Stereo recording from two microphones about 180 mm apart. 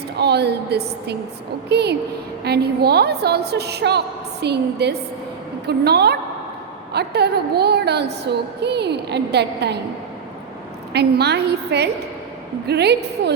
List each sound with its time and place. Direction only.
0.2 s a woman's voice: 65° right (ahead or behind)
10.9 s a woman's voice: 65° right (ahead or behind)